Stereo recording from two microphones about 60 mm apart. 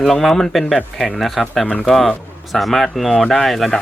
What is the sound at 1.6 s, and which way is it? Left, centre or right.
Speech, left.